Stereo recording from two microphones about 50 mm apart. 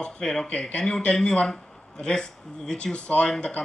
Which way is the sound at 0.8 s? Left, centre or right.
Centre.